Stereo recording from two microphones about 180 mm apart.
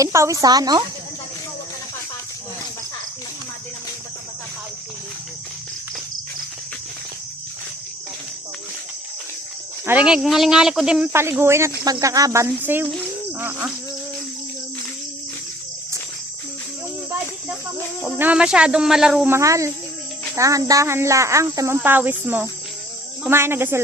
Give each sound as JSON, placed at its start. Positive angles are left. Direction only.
{"t": 0.0, "sound": "cricket", "side_deg": -15}
{"t": 0.4, "sound": "speech", "side_deg": -20}
{"t": 9.8, "sound": "cricket", "side_deg": -10}
{"t": 18.0, "sound": "speech", "side_deg": -5}
{"t": 20.3, "sound": "cricket", "side_deg": -15}